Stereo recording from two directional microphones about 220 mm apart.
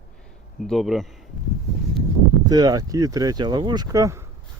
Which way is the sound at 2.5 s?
15° right (ahead or behind).